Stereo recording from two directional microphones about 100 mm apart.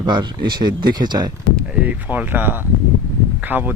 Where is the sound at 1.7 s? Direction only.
15° right (ahead or behind).